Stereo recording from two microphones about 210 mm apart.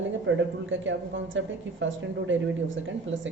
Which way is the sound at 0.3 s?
60° right (ahead or behind).